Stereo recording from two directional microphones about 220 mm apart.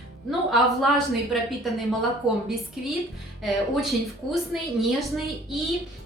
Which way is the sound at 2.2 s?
25° right (ahead or behind).